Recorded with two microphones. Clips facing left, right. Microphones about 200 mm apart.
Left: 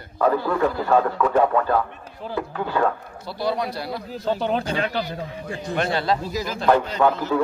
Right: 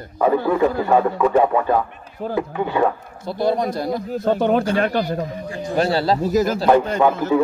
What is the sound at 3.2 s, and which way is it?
Speech, 50° right (ahead or behind).